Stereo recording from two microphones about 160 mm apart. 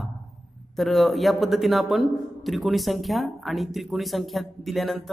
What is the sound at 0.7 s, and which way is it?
A man's voice, centre (ahead or behind).